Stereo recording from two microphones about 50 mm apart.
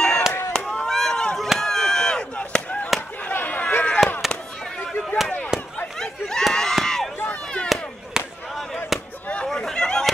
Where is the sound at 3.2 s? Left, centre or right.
Left.